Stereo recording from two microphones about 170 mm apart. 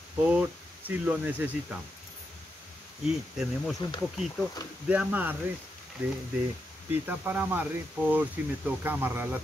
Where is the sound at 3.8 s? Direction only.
30° left (ahead or behind).